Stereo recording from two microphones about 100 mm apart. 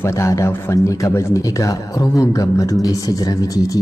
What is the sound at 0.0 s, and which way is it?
A man's voice, 30° left (ahead or behind).